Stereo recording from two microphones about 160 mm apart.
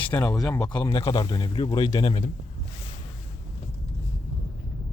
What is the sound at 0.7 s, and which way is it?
Speech, 30° left (ahead or behind).